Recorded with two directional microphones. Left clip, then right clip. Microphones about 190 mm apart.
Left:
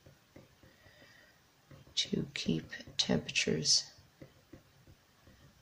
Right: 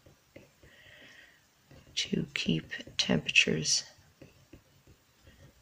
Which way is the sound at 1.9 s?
10° right (ahead or behind).